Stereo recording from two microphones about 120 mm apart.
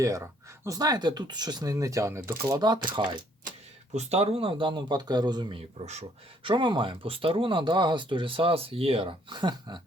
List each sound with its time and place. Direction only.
0.0 s speech: 25° right (ahead or behind)
2.6 s speech: 35° right (ahead or behind)
3.9 s speech: 60° right (ahead or behind); by 5.6 s 40° right (ahead or behind)
5.8 s speech: 65° right (ahead or behind)
6.4 s speech: 40° right (ahead or behind)